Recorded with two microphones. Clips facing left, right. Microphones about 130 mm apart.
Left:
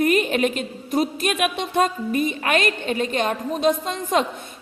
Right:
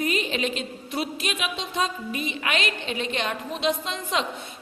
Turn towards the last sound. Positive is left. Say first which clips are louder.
# left 6 dB
turn(degrees=45)  # may be behind; listen again after turning